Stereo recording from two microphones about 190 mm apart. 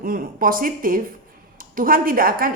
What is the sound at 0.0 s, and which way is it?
A woman's voice, 45° right (ahead or behind).